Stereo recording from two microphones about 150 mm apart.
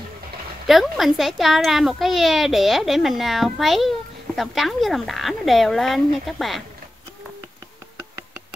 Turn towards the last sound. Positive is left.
turn(degrees=-20)  # may be behind; listen again after turning